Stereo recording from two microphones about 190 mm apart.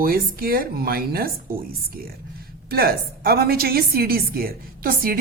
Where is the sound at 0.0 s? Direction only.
50° right (ahead or behind).